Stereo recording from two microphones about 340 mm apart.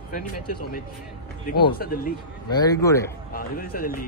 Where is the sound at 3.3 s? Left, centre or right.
Left.